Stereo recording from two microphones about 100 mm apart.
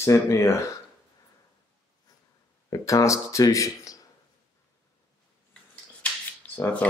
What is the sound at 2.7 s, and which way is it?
Speech, 35° left (ahead or behind).